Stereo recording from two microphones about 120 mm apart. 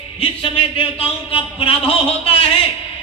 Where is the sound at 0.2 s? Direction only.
50° left (ahead or behind).